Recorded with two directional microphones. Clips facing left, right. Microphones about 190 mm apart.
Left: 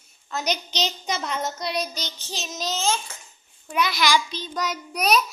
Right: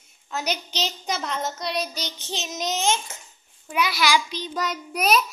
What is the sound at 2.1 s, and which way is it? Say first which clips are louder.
Child singing: right 2 dB; 25° right (ahead or behind).